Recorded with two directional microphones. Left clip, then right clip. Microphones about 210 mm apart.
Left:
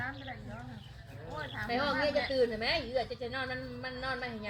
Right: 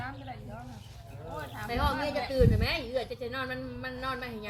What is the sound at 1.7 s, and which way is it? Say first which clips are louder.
A woman's voice: even; 50° right (ahead or behind).